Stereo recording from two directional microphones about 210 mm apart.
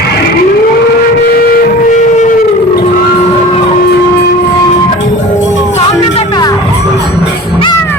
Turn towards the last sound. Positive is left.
turn(degrees=25)  # may be behind; listen again after turning